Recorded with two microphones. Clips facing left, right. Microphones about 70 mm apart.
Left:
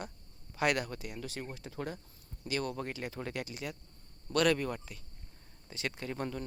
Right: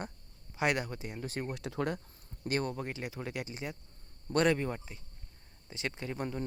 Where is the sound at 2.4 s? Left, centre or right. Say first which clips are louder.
Right 3 dB; right.